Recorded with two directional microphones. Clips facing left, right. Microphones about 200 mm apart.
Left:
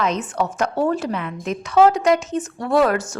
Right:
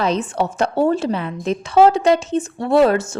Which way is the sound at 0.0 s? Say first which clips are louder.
Right 2 dB; 30° right (ahead or behind).